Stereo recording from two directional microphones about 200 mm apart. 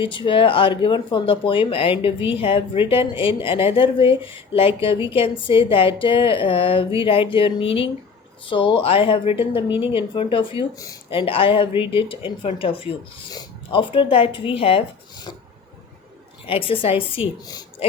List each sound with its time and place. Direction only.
0.0 s a woman's voice: 25° left (ahead or behind)
16.5 s a woman's voice: 25° left (ahead or behind)